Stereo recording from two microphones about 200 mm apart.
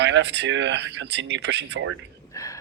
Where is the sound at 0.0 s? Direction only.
60° right (ahead or behind).